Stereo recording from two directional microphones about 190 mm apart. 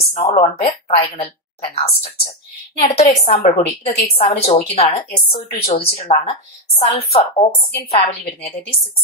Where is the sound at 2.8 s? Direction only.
40° left (ahead or behind).